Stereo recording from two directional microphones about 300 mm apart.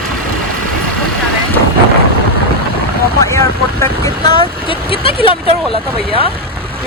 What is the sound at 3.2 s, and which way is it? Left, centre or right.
Speech, centre.